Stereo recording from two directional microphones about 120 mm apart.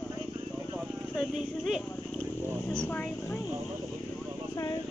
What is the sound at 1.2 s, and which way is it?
Speech, 5° right (ahead or behind).